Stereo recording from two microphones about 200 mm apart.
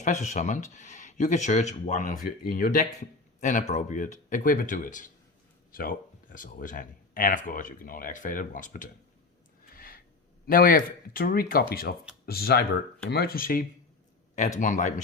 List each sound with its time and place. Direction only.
0.0 s speech: 35° left (ahead or behind)
9.7 s a sound: 45° left (ahead or behind)
10.4 s speech: 45° left (ahead or behind)